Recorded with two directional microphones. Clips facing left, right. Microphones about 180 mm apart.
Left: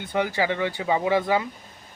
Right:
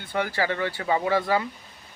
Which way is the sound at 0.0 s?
20° left (ahead or behind).